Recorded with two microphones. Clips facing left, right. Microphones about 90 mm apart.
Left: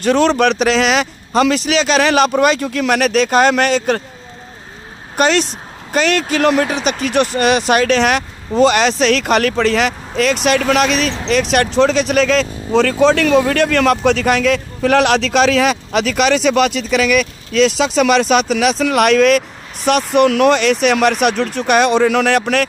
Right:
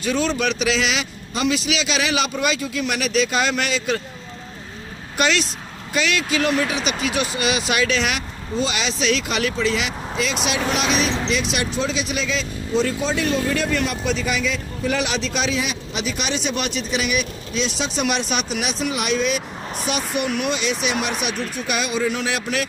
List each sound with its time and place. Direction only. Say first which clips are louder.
0.0 s speech: left 9 dB; 70° left (ahead or behind); by 4.0 s 50° left (ahead or behind)
5.1 s a woman's voice: left 6 dB; 40° left (ahead or behind); by 11.1 s 70° left (ahead or behind)
11.2 s speech: left 8 dB; 60° left (ahead or behind)